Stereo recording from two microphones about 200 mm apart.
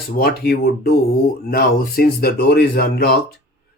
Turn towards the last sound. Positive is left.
turn(degrees=50)  # may be behind; listen again after turning